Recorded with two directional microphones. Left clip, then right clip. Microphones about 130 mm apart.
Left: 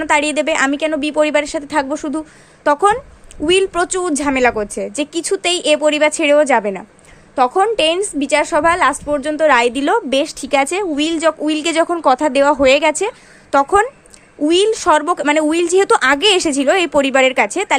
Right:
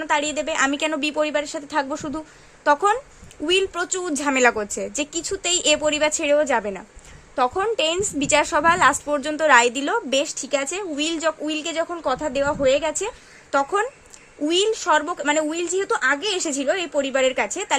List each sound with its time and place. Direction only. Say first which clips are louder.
0.0 s a woman's voice: left 7 dB; 20° left (ahead or behind)
0.7 s a woman's voice: left 5 dB; centre (ahead or behind)
1.1 s a woman's voice: left 8 dB; 20° left (ahead or behind)
4.1 s a woman's voice: left 1 dB; centre (ahead or behind)
5.2 s a woman's voice: left 9 dB; 25° left (ahead or behind)
5.5 s a woman's voice: left 5 dB; 5° left (ahead or behind)
5.8 s a woman's voice: left 7 dB; 15° left (ahead or behind)
6.6 s a woman's voice: left 8 dB; 10° left (ahead or behind)
7.9 s a woman's voice: left 6 dB; centre (ahead or behind); by 11.7 s 20° left (ahead or behind)
11.7 s a woman's voice: left 12 dB; 35° left (ahead or behind); by 14.8 s 15° left (ahead or behind)
14.8 s a woman's voice: left 7 dB; 30° left (ahead or behind)